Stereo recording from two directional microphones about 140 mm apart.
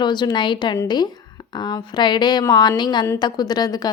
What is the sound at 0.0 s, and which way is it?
A woman's voice, 30° left (ahead or behind).